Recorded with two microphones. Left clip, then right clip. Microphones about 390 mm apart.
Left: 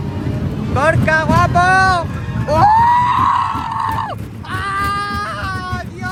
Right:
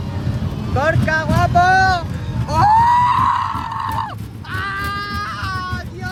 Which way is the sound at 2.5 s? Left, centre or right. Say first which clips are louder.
Left 1 dB; centre.